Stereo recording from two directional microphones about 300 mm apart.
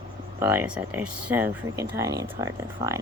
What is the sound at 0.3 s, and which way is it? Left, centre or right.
Speech, centre.